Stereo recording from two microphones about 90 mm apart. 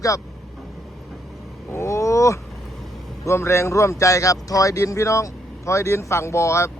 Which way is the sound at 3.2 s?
30° left (ahead or behind).